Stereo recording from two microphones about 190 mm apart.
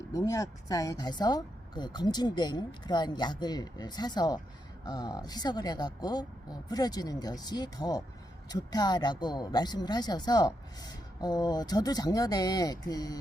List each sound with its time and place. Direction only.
0.1 s speech: 20° left (ahead or behind)